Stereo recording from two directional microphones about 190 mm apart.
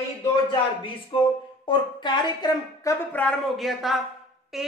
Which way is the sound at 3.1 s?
5° left (ahead or behind).